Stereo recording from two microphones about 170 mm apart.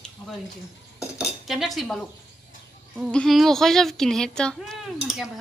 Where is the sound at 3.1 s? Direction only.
5° left (ahead or behind).